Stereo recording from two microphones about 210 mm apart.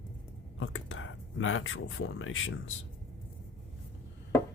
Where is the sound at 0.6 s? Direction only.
65° left (ahead or behind).